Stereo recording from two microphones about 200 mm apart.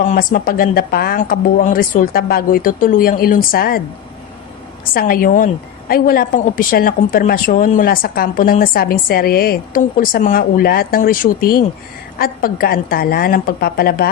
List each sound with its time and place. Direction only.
0.0 s a woman's voice: 40° left (ahead or behind)
4.9 s a woman's voice: 45° left (ahead or behind)